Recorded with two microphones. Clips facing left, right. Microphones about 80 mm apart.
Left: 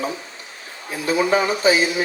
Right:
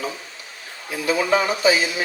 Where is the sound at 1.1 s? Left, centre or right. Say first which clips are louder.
Left 1 dB; left.